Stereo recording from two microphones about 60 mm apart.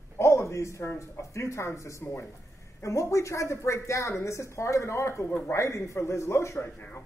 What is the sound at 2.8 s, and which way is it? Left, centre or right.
A man's voice, left.